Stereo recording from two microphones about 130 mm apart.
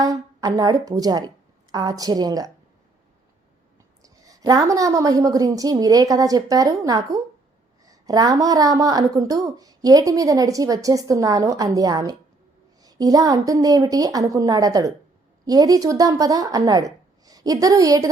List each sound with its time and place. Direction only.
0.0 s a woman's voice: 30° right (ahead or behind)
4.0 s a woman's voice: 25° right (ahead or behind)